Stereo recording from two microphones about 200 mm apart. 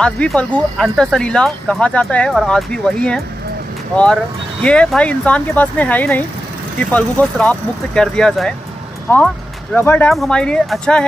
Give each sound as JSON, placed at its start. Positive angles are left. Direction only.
{"t": 0.0, "sound": "speech", "side_deg": 5}